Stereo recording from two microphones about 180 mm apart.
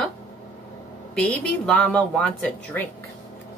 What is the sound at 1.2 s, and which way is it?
A woman's voice, 5° left (ahead or behind).